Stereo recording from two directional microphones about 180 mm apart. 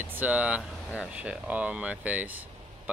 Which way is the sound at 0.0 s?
10° right (ahead or behind).